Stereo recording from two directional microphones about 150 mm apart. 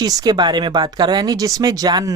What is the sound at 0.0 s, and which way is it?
Speech, 25° right (ahead or behind).